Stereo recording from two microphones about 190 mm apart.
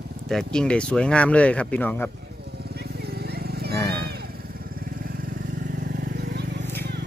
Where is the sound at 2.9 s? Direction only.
55° right (ahead or behind).